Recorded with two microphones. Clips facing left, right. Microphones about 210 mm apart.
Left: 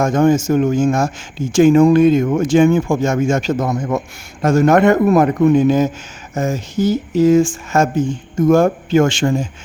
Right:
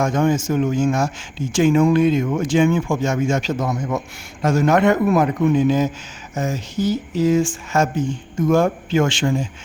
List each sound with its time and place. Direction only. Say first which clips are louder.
0.0 s speech: left 5 dB; 45° left (ahead or behind)